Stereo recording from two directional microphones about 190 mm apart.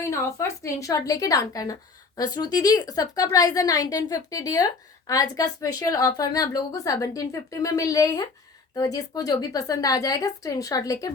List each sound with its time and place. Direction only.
0.1 s a woman's voice: 15° left (ahead or behind)